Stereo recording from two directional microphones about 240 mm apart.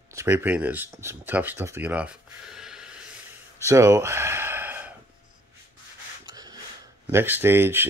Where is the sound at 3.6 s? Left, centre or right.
Centre.